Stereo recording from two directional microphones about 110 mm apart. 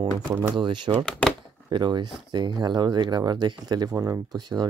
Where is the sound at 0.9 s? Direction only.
10° left (ahead or behind).